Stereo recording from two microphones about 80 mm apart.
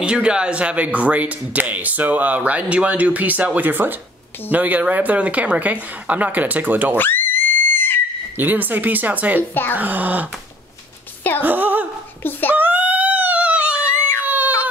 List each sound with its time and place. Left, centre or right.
0.0 s speech: centre
7.0 s screaming: left
8.4 s speech: right
9.5 s a child's voice: left
9.8 s speech: right
11.4 s a sound: right
12.2 s a child's voice: left
12.5 s dog: right
14.2 s baby cry: right